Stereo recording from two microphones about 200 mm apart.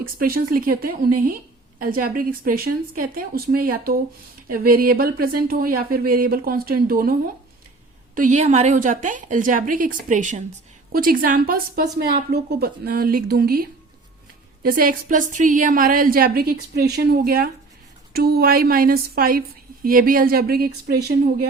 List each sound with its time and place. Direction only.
0.2 s a woman's voice: 45° right (ahead or behind)